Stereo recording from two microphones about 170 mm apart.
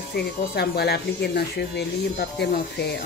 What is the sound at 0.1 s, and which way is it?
Speech, 70° left (ahead or behind).